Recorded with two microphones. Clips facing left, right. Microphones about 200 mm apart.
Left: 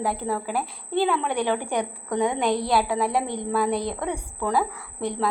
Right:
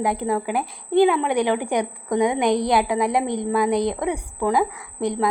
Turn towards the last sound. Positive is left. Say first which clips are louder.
# right 4 dB
turn(degrees=-15)  # may be behind; listen again after turning